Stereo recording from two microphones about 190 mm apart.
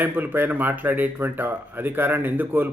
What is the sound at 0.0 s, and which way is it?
Speech, 10° right (ahead or behind).